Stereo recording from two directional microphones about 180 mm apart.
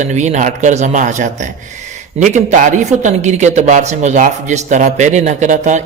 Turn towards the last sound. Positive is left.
turn(degrees=-40)  # may be behind; listen again after turning